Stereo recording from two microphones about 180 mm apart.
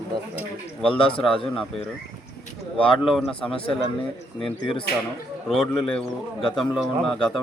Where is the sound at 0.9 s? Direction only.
30° left (ahead or behind).